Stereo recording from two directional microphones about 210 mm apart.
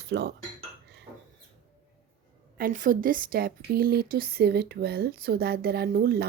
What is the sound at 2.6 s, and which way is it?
Speech, 40° right (ahead or behind).